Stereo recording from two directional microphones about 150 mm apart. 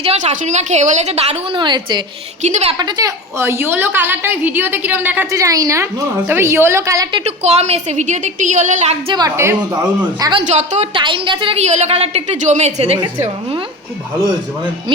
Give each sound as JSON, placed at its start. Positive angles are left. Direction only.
{"t": 0.0, "sound": "a woman's voice", "side_deg": -45}
{"t": 1.6, "sound": "a woman's voice", "side_deg": -30}
{"t": 2.4, "sound": "a woman's voice", "side_deg": -50}
{"t": 2.7, "sound": "a woman's voice", "side_deg": -30}
{"t": 3.3, "sound": "a woman's voice", "side_deg": -15}
{"t": 7.3, "sound": "a woman's voice", "side_deg": -45}
{"t": 9.1, "sound": "a woman's voice", "side_deg": -20}
{"t": 10.4, "sound": "a woman's voice", "side_deg": -50}
{"t": 10.9, "sound": "a woman's voice", "side_deg": -35}